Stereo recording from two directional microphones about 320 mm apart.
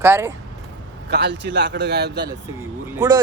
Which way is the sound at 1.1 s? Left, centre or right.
Right.